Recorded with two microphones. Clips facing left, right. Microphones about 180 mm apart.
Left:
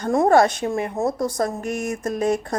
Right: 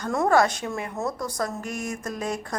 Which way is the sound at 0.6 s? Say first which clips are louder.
Left 7 dB; 35° left (ahead or behind).